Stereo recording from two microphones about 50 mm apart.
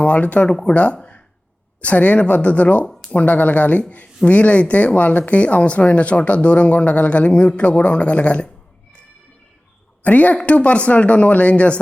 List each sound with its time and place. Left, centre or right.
0.0 s speech: left
0.4 s speech: centre
0.7 s speech: left
10.0 s a woman's voice: left